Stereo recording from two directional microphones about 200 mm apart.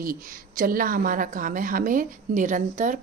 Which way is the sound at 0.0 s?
45° right (ahead or behind).